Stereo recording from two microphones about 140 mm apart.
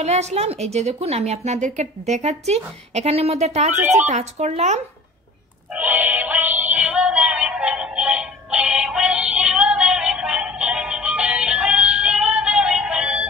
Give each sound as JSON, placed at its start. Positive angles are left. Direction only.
{"t": 0.0, "sound": "a woman's voice", "side_deg": -50}
{"t": 5.7, "sound": "synthetic singing", "side_deg": -10}